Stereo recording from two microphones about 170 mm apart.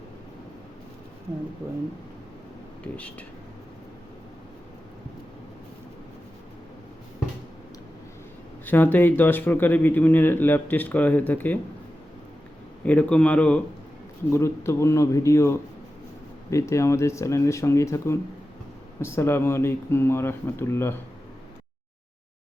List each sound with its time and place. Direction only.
2.8 s speech: 10° left (ahead or behind)
8.6 s speech: 10° left (ahead or behind)
12.8 s speech: 10° left (ahead or behind)